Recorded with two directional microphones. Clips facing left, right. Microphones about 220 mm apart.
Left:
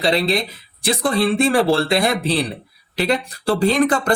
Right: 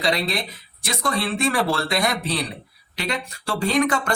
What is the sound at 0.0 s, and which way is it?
Speech, 30° left (ahead or behind).